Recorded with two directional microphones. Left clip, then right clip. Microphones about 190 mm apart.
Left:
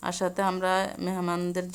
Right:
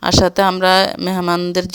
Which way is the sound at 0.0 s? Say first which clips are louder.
Right 14 dB; 45° right (ahead or behind).